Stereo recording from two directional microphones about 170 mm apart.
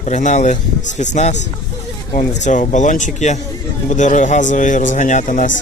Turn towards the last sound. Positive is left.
turn(degrees=50)  # may be behind; listen again after turning